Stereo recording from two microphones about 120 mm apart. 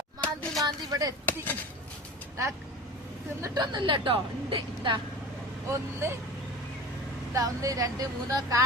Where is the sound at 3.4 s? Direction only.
35° right (ahead or behind).